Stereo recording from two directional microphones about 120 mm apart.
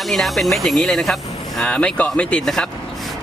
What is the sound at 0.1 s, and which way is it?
Speech, centre (ahead or behind).